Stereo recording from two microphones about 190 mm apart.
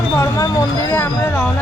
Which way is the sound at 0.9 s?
10° left (ahead or behind).